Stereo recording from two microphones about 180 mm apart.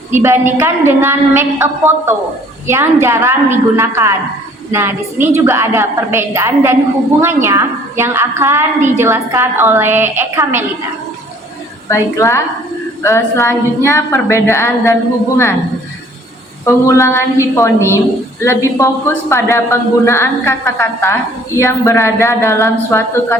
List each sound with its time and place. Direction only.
0.1 s a woman's voice: 15° right (ahead or behind)
11.9 s a woman's voice: 15° left (ahead or behind)
16.6 s a woman's voice: 15° left (ahead or behind)